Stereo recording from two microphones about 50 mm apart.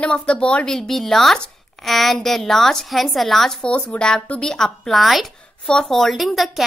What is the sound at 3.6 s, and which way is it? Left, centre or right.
Speech, left.